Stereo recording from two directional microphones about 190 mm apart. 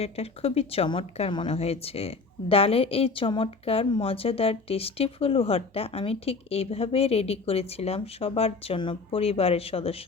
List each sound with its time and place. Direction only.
0.0 s a woman's voice: 30° left (ahead or behind)